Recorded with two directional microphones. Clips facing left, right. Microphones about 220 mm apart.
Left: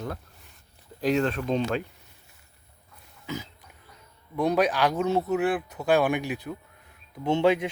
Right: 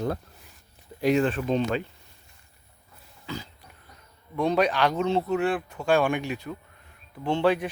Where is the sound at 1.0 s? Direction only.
10° right (ahead or behind).